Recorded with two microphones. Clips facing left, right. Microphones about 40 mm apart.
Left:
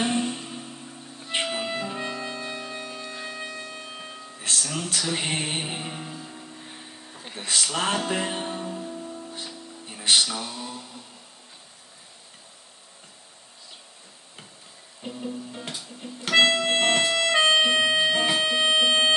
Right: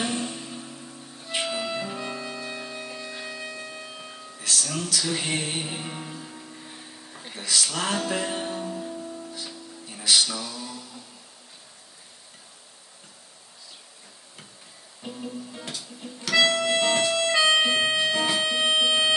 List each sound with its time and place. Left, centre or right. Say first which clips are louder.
0.0 s vehicle: left 3 dB; left
1.3 s music: left 1 dB; left
1.9 s music: left 2 dB; centre
4.4 s music: even; left
5.9 s music: even; centre
7.4 s music: left 1 dB; left
9.0 s music: even; centre
9.3 s music: even; left
15.0 s music: left 2 dB; centre
15.7 s music: left 1 dB; left
17.6 s music: left 2 dB; left